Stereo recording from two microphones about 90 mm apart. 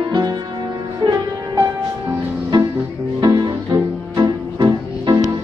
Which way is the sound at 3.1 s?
55° right (ahead or behind).